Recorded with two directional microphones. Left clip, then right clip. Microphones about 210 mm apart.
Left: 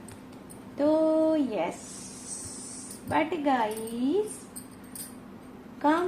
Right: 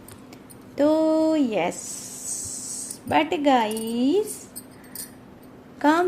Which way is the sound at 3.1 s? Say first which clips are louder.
Right 6 dB; 45° right (ahead or behind).